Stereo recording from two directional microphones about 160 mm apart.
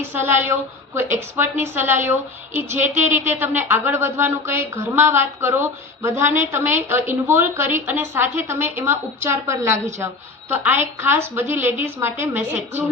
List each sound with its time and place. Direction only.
0.0 s a woman's voice: 15° right (ahead or behind)